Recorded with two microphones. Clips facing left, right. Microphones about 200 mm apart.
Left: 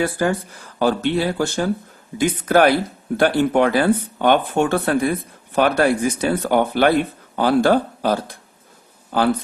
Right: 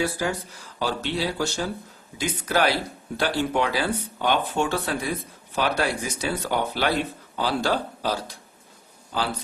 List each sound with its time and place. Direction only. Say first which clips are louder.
0.0 s speech: left 6 dB; 55° left (ahead or behind)